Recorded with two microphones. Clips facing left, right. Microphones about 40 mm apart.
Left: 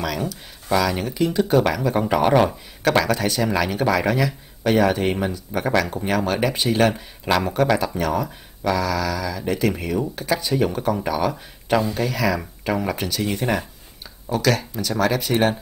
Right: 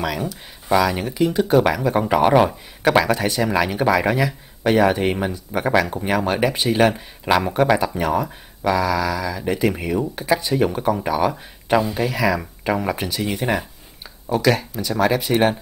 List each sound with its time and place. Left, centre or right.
0.3 s speech: centre